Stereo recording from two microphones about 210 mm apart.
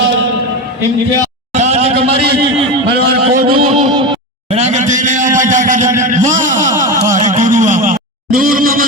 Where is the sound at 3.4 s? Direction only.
25° right (ahead or behind).